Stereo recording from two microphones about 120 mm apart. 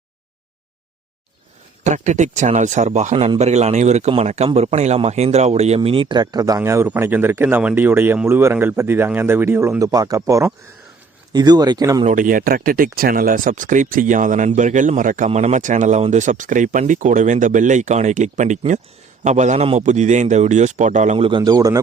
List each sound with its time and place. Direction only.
1.8 s speech: 80° right; by 6.6 s 35° right (ahead or behind)
6.6 s speech: 20° right (ahead or behind)
13.3 s speech: 90° right
19.2 s a man's voice: 80° right
21.2 s speech: 45° right (ahead or behind)